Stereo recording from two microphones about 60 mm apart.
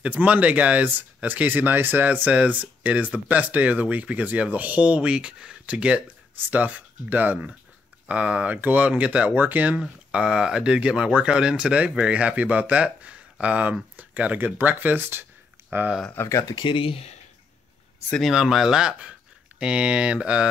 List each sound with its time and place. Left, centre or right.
0.0 s speech: right
9.3 s speech: right
10.1 s speech: centre; by 15.9 s right
16.3 s speech: left
18.2 s speech: centre